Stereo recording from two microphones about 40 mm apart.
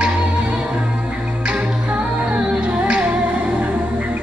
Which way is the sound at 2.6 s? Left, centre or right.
Right.